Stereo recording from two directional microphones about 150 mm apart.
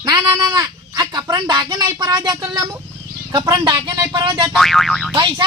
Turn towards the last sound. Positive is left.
turn(degrees=0)  # may be behind; listen again after turning